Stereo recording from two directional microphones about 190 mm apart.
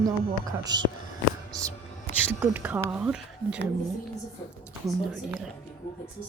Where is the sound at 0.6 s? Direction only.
20° right (ahead or behind); by 3.6 s 5° right (ahead or behind).